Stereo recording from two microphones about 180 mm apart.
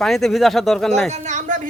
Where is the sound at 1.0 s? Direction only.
40° right (ahead or behind).